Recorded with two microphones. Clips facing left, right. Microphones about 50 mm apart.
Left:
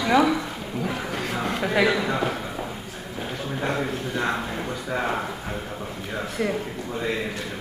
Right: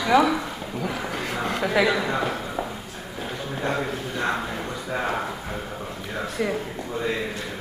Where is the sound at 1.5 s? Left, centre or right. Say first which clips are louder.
Even; centre.